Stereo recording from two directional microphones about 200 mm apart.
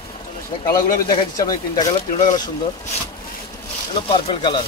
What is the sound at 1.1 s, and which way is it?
Speech, 20° left (ahead or behind).